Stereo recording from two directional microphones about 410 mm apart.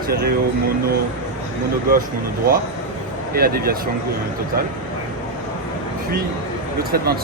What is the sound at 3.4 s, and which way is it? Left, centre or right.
Speech, right.